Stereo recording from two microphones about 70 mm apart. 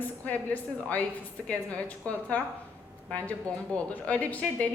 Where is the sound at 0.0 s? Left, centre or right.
Left.